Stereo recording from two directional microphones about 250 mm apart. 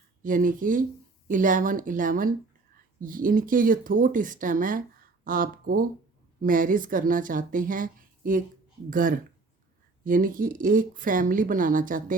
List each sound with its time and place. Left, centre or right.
0.2 s speech: right